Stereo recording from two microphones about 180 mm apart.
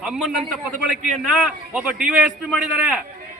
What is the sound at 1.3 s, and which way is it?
A man's voice, 5° right (ahead or behind).